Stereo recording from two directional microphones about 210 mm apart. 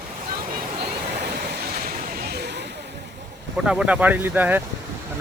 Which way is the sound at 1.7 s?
40° right (ahead or behind).